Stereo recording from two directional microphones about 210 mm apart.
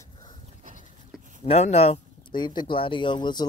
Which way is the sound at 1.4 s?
30° left (ahead or behind).